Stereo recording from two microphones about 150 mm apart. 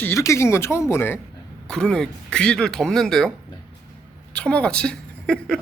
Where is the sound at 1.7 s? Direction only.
5° left (ahead or behind).